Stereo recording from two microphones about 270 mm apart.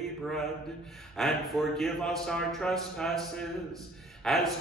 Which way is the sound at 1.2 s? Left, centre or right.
Centre.